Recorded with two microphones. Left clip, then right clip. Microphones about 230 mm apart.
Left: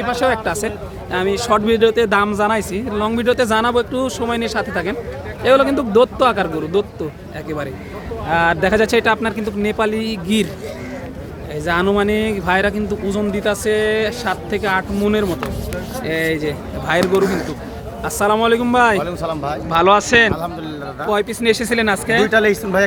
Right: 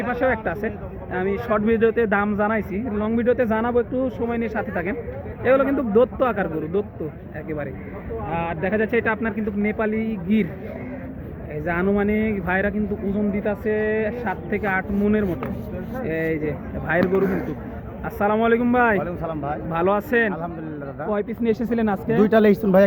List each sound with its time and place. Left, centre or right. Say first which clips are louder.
0.3 s speech: left 5 dB; centre
8.3 s speech: left 10 dB; left; by 10.5 s centre
11.7 s a man's voice: left 6 dB; centre
18.0 s speech: left 5 dB; centre
22.2 s speech: right 1 dB; right